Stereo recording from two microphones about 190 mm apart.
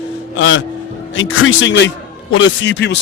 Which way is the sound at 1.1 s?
90° left.